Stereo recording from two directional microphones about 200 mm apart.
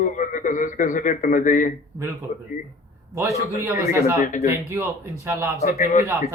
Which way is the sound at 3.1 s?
15° right (ahead or behind).